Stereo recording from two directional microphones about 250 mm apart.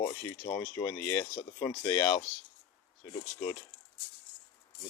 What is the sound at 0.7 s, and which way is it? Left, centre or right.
Speech, centre.